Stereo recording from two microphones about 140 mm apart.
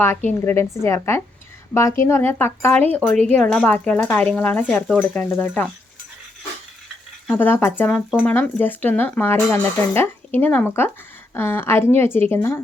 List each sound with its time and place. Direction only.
0.3 s speech: 15° left (ahead or behind)
7.3 s speech: 15° left (ahead or behind)